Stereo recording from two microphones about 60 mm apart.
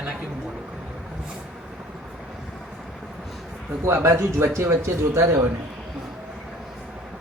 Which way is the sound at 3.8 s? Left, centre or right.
Right.